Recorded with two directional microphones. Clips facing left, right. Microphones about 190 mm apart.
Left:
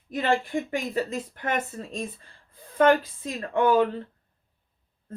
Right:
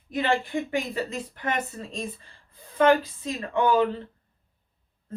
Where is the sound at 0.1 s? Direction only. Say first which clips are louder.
Even; 45° left (ahead or behind).